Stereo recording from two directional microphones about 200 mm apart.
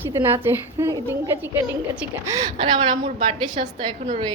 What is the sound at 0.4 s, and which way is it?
A woman's voice, 15° right (ahead or behind).